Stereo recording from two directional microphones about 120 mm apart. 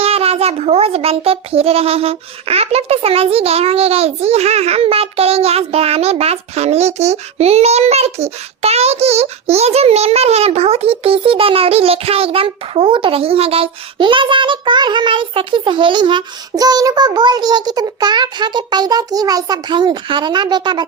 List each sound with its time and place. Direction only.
0.0 s a child's voice: 55° right (ahead or behind); by 20.8 s 40° right (ahead or behind)